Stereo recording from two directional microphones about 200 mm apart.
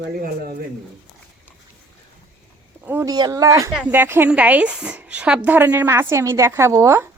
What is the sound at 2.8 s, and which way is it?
Speech, 15° right (ahead or behind).